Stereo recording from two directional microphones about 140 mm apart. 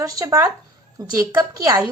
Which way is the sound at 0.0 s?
25° right (ahead or behind).